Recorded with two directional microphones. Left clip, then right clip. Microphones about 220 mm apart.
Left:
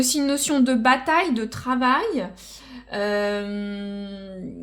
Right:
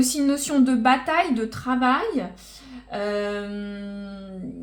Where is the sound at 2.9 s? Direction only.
45° left (ahead or behind).